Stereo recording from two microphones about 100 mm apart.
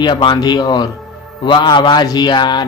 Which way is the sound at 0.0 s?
50° left (ahead or behind).